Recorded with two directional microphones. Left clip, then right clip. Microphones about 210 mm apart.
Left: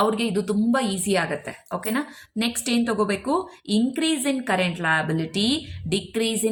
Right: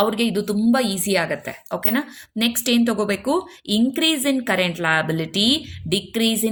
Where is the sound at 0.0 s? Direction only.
35° right (ahead or behind).